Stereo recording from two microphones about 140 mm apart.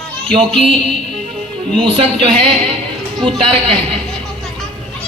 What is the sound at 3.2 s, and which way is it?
Speech, 40° right (ahead or behind).